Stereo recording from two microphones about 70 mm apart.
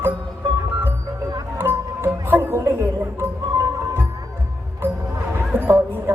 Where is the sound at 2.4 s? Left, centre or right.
Right.